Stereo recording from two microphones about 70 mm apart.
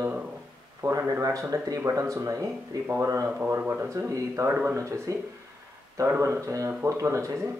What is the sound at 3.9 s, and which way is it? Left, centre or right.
Speech, right.